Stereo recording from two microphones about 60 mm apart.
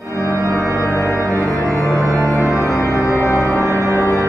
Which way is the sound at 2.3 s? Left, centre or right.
Centre.